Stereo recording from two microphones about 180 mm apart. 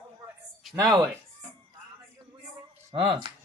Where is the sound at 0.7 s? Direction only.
20° right (ahead or behind).